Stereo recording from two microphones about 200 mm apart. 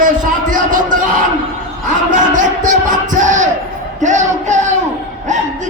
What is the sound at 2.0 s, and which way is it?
Basketball bounce, 40° right (ahead or behind).